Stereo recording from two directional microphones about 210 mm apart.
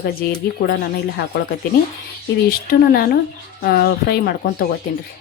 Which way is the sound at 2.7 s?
45° left (ahead or behind).